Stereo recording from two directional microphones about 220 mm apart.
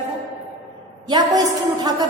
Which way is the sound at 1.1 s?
20° right (ahead or behind).